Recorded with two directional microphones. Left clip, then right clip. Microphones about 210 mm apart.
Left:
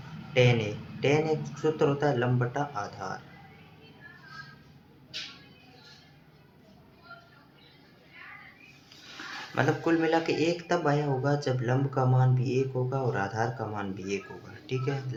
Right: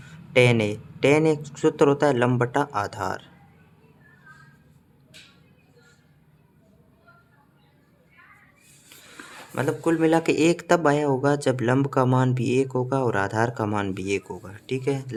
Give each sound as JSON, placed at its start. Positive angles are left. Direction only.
{"t": 0.3, "sound": "speech", "side_deg": -60}
{"t": 9.6, "sound": "speech", "side_deg": -55}